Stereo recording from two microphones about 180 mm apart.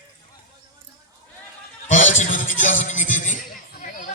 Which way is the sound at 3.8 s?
45° left (ahead or behind).